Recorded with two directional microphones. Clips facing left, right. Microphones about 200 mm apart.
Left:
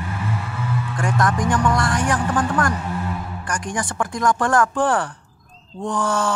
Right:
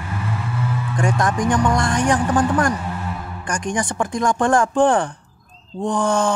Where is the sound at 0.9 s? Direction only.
20° right (ahead or behind).